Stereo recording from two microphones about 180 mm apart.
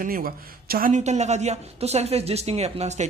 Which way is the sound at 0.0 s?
55° right (ahead or behind).